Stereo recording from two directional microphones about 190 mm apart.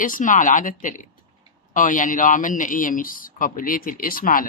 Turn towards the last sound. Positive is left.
turn(degrees=45)  # may be behind; listen again after turning